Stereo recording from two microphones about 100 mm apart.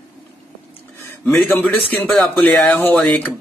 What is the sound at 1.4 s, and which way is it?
Speech, 20° left (ahead or behind).